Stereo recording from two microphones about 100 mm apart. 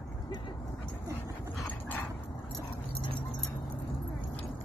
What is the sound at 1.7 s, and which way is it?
Dog, 15° left (ahead or behind).